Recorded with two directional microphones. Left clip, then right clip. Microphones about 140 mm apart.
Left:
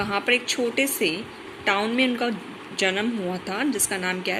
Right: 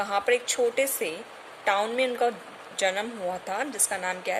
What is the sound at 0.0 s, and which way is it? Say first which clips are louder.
A woman's voice: left 2 dB; 25° right (ahead or behind).